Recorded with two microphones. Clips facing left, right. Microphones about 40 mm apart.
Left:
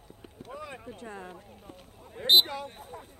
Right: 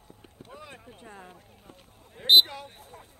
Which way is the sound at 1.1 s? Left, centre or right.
Centre.